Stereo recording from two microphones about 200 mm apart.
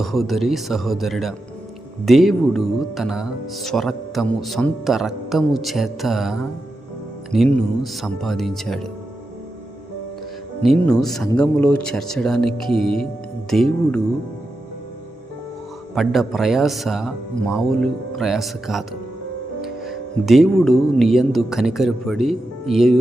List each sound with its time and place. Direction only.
0.0 s speech: centre (ahead or behind)
10.6 s speech: centre (ahead or behind)
16.0 s speech: centre (ahead or behind)